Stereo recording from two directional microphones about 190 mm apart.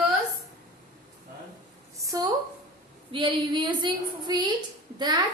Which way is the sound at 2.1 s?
20° right (ahead or behind).